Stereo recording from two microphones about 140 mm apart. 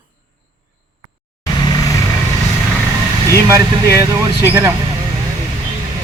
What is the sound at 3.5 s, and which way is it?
Speech, 25° right (ahead or behind).